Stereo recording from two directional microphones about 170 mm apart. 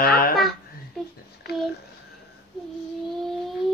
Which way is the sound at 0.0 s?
60° left (ahead or behind).